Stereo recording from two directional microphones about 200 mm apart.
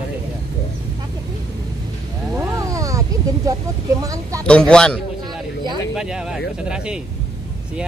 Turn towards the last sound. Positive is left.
turn(degrees=-5)  # may be behind; listen again after turning